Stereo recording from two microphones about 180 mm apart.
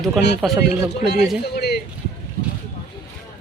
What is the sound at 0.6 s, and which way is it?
Speech, 65° left (ahead or behind).